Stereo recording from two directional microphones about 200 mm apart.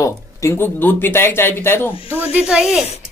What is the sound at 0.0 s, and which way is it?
Speech, 15° left (ahead or behind).